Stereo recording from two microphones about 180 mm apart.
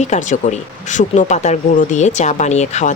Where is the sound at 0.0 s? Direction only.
40° left (ahead or behind).